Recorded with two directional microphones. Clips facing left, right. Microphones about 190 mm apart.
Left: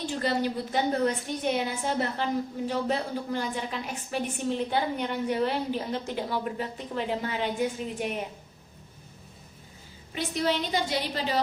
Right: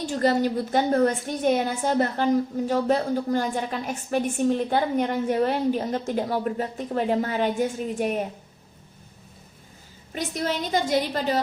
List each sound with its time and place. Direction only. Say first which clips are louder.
0.0 s a woman's voice: right 6 dB; 45° right (ahead or behind)
10.2 s a woman's voice: even; 45° right (ahead or behind)